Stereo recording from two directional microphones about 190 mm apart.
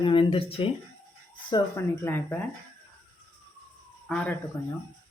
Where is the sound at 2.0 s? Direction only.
10° left (ahead or behind).